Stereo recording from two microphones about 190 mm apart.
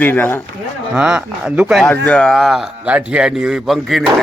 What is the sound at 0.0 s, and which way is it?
Speech, 10° left (ahead or behind).